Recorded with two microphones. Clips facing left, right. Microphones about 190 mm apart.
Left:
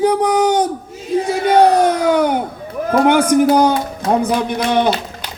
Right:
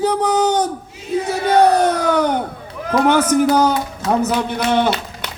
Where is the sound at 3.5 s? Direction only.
10° left (ahead or behind).